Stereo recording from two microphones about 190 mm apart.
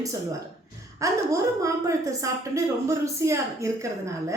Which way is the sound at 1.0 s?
15° right (ahead or behind).